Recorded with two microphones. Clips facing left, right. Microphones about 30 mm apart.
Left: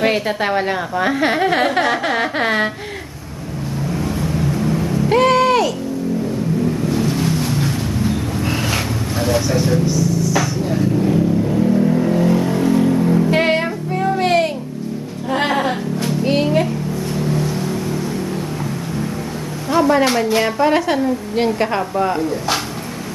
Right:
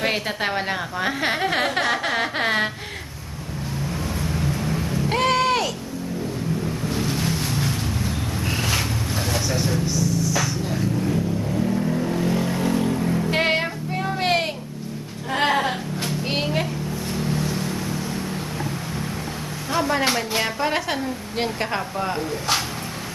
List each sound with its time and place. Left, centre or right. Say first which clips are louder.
0.0 s a woman's voice: left 6 dB; centre
4.6 s music: left 6 dB; centre
6.9 s vehicle: left 6 dB; centre
12.4 s vehicle: left 6 dB; centre
12.9 s music: left 8 dB; centre
13.3 s music: left 5 dB; centre
15.3 s music: left 3 dB; centre
19.7 s a woman's voice: left 7 dB; centre